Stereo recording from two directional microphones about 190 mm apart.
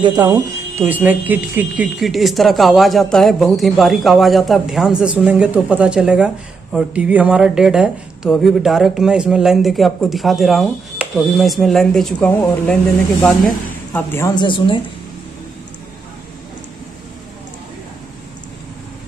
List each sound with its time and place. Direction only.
0.0 s speech: 20° right (ahead or behind); by 14.8 s 25° left (ahead or behind)